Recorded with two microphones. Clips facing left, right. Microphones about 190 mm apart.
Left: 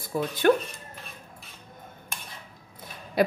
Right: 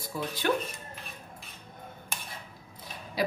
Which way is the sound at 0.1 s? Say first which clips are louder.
Left 6 dB; 55° left (ahead or behind).